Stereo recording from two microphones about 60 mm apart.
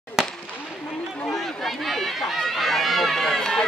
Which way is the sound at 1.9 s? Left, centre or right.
Centre.